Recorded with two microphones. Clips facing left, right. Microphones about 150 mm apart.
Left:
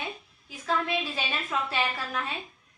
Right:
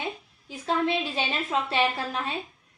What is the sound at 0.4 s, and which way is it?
A woman's voice, 30° right (ahead or behind).